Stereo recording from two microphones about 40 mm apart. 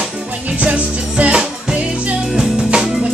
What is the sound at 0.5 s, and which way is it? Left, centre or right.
Music, right.